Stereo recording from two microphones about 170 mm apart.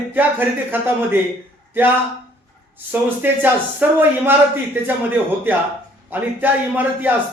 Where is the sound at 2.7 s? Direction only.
10° right (ahead or behind).